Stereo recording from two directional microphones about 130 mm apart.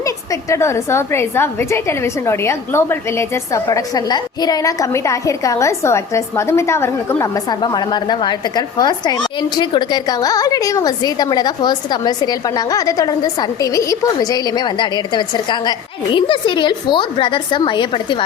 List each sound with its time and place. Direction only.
0.0 s a woman's voice: 25° left (ahead or behind)
7.6 s a woman's voice: 35° left (ahead or behind)